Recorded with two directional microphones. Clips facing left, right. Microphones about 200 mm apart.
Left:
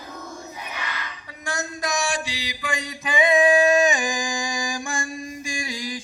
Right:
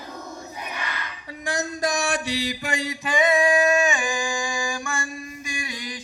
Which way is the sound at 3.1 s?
15° left (ahead or behind).